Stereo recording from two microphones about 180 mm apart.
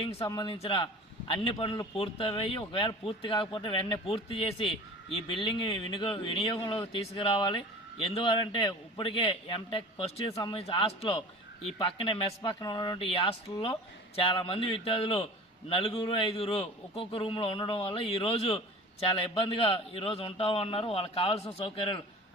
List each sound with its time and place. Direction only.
0.0 s a man's voice: 35° left (ahead or behind)